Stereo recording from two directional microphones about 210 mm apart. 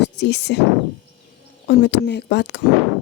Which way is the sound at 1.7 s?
55° left (ahead or behind).